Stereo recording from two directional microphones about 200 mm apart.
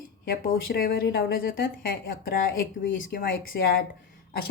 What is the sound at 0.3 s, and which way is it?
A woman's voice, 50° left (ahead or behind).